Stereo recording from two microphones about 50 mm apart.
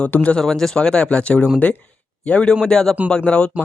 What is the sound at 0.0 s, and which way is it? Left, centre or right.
Speech, left.